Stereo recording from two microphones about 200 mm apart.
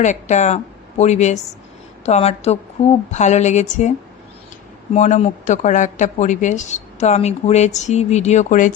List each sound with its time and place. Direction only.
0.0 s a woman's voice: 35° left (ahead or behind)
4.9 s a woman's voice: 35° left (ahead or behind)